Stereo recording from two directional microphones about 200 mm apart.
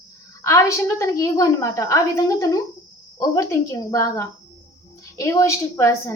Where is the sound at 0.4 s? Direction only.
15° left (ahead or behind).